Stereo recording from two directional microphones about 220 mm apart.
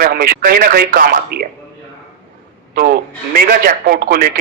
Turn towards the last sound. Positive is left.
turn(degrees=-40)  # may be behind; listen again after turning